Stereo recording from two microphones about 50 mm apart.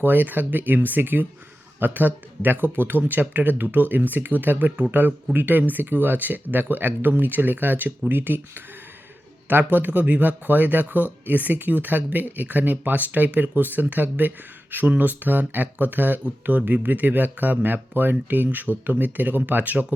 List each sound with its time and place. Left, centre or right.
0.0 s speech: right